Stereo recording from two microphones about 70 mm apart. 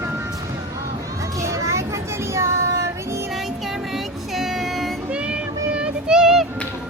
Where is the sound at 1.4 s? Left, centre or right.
Right.